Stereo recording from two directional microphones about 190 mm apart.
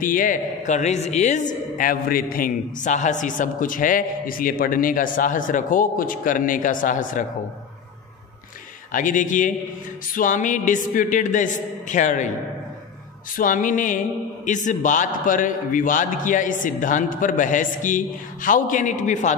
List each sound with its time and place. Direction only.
0.0 s a man's voice: 45° left (ahead or behind)
8.9 s a man's voice: 45° left (ahead or behind)
13.4 s a man's voice: 45° left (ahead or behind)